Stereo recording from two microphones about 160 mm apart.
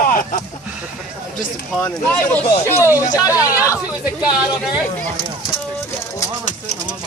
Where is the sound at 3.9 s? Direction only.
10° right (ahead or behind).